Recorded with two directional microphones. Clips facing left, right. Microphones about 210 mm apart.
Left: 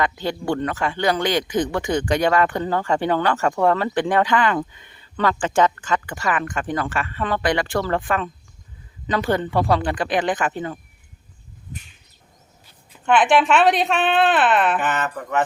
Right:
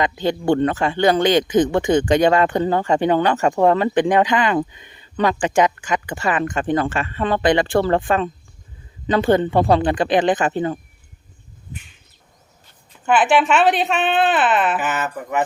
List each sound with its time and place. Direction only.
0.0 s speech: 20° right (ahead or behind)
13.1 s speech: 5° right (ahead or behind)